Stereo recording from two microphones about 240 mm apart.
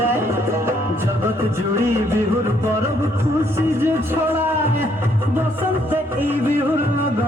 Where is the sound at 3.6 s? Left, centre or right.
Centre.